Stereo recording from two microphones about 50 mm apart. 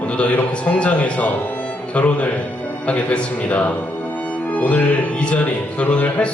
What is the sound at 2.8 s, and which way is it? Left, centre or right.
A man's voice, left.